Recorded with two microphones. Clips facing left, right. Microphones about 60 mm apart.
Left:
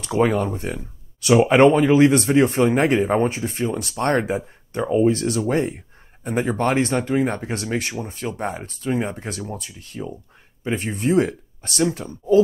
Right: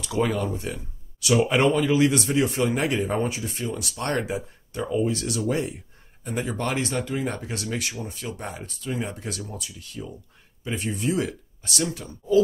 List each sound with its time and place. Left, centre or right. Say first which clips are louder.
0.0 s speech: left 5 dB; left